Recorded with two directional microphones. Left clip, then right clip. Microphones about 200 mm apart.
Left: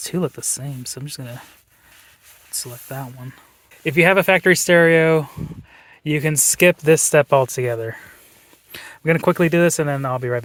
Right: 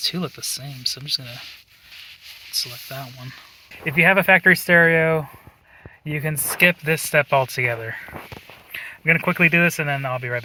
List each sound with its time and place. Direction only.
0.1 s speech: 40° left (ahead or behind)
0.5 s speech: 55° left (ahead or behind)
2.6 s speech: 40° left (ahead or behind)
3.8 s speech: 55° left (ahead or behind)
6.1 s speech: 60° left (ahead or behind); by 8.0 s 35° left (ahead or behind)
8.7 s speech: 55° left (ahead or behind)